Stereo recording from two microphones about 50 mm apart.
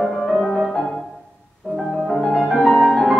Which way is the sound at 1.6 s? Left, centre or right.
Centre.